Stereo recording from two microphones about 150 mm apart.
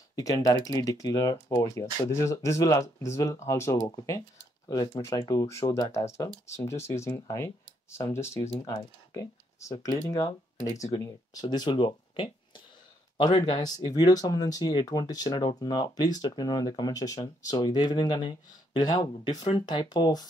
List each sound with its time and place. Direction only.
0.1 s speech: 25° left (ahead or behind)